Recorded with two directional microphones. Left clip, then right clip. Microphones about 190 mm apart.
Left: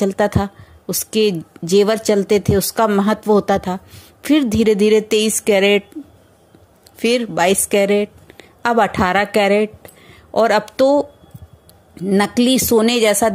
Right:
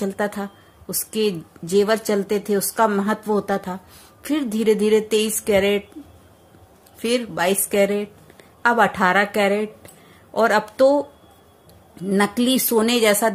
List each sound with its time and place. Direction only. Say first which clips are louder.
0.0 s speech: left 7 dB; 35° left (ahead or behind)
7.0 s a woman's voice: left 6 dB; 35° left (ahead or behind)